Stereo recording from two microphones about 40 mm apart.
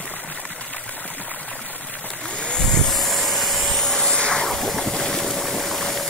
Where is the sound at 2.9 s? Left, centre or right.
Centre; by 4.5 s left.